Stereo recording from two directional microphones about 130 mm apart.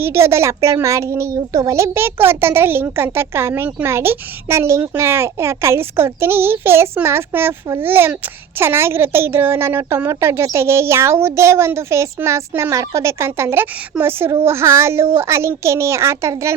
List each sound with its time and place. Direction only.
0.0 s a woman's voice: 20° right (ahead or behind)